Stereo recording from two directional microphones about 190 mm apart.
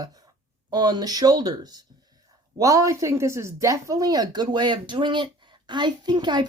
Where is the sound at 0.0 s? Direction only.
20° right (ahead or behind).